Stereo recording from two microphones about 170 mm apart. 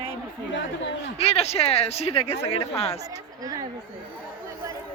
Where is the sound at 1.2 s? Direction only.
40° left (ahead or behind).